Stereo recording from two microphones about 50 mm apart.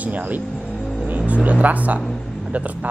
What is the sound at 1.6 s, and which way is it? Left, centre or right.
Speech, right.